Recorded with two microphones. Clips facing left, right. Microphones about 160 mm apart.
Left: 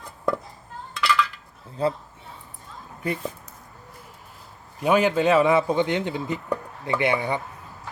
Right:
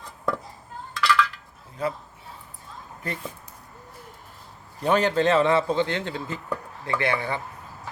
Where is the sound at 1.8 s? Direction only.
30° left (ahead or behind).